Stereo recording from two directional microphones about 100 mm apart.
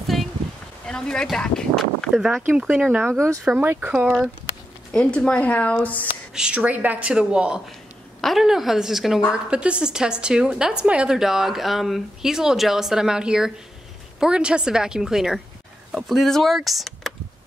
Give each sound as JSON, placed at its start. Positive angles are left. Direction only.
{"t": 0.0, "sound": "a sound", "side_deg": 0}
{"t": 0.8, "sound": "speech", "side_deg": 10}
{"t": 2.1, "sound": "a woman's voice", "side_deg": -5}
{"t": 4.9, "sound": "speech", "side_deg": 10}
{"t": 6.3, "sound": "a woman's voice", "side_deg": -10}